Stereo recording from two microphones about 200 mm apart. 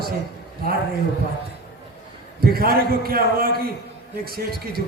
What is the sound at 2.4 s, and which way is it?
A man's voice, 50° right (ahead or behind).